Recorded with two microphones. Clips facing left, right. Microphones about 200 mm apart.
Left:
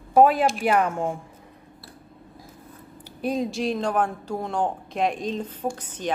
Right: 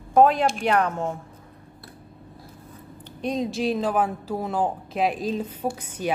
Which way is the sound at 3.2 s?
5° left (ahead or behind).